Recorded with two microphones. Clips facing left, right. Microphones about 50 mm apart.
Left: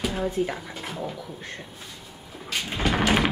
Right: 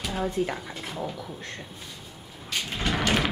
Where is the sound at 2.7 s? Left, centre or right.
Centre.